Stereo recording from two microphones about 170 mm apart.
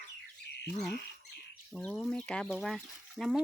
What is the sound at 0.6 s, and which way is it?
Speech, 5° left (ahead or behind).